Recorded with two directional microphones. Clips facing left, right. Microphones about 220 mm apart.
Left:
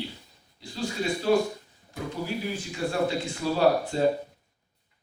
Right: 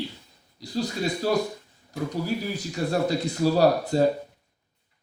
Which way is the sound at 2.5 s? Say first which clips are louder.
Even; 40° right (ahead or behind).